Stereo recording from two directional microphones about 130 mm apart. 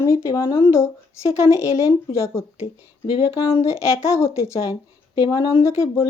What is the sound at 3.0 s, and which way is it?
Speech, 45° left (ahead or behind).